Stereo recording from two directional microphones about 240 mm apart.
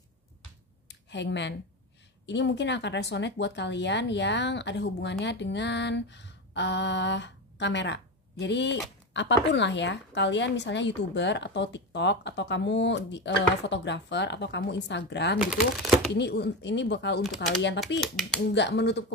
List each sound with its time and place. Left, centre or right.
0.8 s a sound: left
2.2 s speech: left
15.3 s speech: centre
16.2 s speech: left